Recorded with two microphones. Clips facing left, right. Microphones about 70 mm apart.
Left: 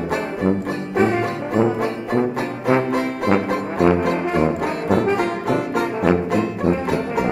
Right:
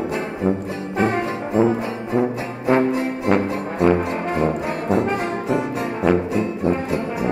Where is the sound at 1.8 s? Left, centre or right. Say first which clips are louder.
Left 1 dB; left.